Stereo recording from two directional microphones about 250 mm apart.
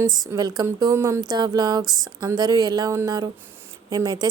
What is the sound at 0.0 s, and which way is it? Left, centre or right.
A woman's voice, centre.